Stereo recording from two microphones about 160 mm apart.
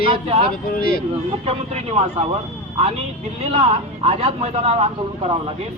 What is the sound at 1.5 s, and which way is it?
Speech, 40° right (ahead or behind).